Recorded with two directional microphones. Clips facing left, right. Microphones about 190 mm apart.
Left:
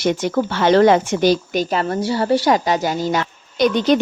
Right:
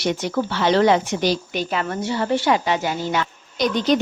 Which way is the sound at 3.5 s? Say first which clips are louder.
Left 4 dB; 60° left (ahead or behind).